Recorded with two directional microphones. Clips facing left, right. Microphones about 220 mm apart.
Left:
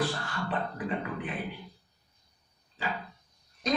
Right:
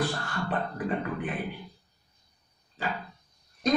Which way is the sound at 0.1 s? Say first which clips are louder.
Right 2 dB; 45° right (ahead or behind).